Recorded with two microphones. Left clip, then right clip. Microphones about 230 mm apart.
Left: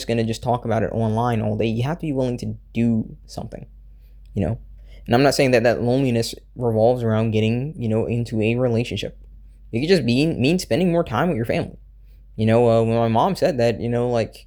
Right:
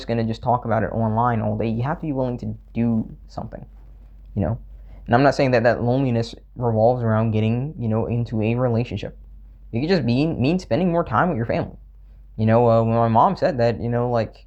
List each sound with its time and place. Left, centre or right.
0.0 s speech: left